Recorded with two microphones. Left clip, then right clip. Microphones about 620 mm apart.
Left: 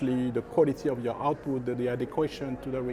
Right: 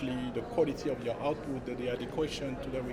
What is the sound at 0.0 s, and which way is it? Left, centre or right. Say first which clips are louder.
Speech: left 6 dB; left.